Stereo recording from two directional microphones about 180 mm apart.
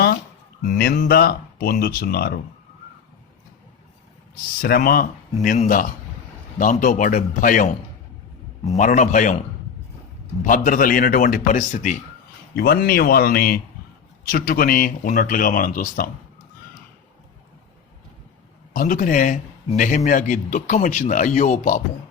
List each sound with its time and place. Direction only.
0.6 s speech: 60° left (ahead or behind)
4.6 s a man's voice: 55° left (ahead or behind)
10.4 s a man's voice: 50° left (ahead or behind)
12.5 s a man's voice: 60° left (ahead or behind)
18.7 s a man's voice: 50° left (ahead or behind)